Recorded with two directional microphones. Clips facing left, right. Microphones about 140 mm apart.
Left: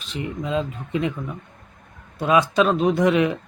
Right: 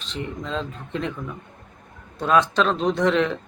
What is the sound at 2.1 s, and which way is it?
Speech, 10° left (ahead or behind).